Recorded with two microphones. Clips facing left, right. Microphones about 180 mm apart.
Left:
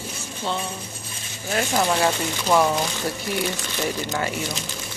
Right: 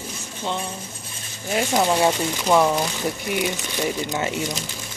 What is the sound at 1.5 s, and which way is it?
Speech, 15° right (ahead or behind).